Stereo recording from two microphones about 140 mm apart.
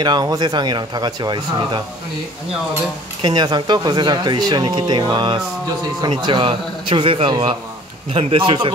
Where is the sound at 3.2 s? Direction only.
30° right (ahead or behind).